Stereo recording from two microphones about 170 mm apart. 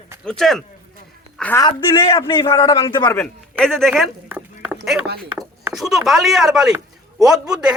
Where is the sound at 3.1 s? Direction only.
5° left (ahead or behind).